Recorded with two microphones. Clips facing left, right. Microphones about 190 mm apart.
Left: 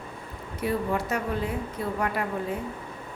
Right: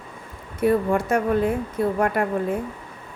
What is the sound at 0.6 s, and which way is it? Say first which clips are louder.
A woman's voice: right 7 dB; 50° right (ahead or behind).